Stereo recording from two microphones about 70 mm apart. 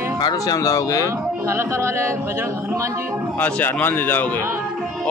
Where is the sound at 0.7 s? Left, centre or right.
Left.